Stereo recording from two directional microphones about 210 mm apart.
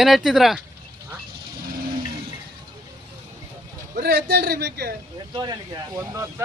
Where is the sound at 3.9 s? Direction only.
50° right (ahead or behind).